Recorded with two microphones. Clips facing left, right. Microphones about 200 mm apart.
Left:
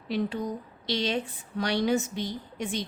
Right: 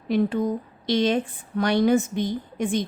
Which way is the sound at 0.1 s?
50° right (ahead or behind).